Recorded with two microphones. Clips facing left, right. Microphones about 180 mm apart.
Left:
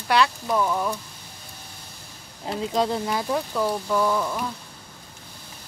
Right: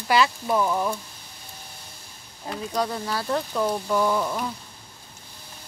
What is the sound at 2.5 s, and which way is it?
Speech, 20° left (ahead or behind).